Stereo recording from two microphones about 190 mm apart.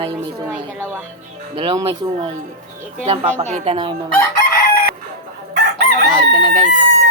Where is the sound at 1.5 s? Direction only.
25° right (ahead or behind).